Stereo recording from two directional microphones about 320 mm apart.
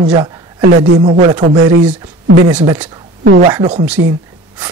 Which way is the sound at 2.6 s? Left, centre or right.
Centre.